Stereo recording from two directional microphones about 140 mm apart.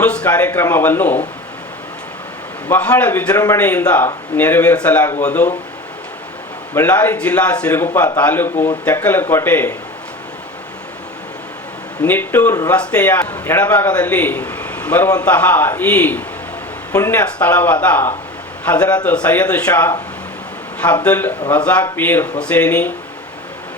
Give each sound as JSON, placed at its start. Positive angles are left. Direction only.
{"t": 0.0, "sound": "a man's voice", "side_deg": 10}
{"t": 2.6, "sound": "a man's voice", "side_deg": 10}
{"t": 6.7, "sound": "a man's voice", "side_deg": 15}
{"t": 12.0, "sound": "a man's voice", "side_deg": 15}